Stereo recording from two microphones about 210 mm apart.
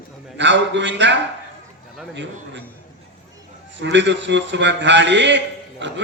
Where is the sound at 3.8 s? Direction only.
60° right (ahead or behind).